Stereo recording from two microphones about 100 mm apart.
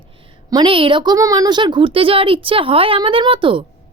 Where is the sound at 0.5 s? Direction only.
55° right (ahead or behind).